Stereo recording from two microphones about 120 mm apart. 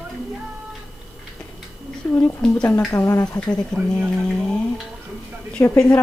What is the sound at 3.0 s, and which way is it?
Speech, 20° left (ahead or behind).